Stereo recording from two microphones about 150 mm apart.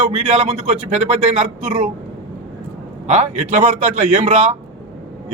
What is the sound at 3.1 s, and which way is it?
Speech, 50° right (ahead or behind).